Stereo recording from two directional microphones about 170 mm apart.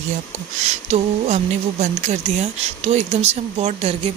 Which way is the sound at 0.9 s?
40° right (ahead or behind).